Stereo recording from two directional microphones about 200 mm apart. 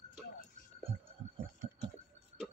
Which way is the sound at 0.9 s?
30° right (ahead or behind).